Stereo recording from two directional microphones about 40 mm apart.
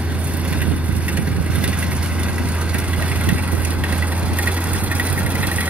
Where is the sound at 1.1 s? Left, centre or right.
Right.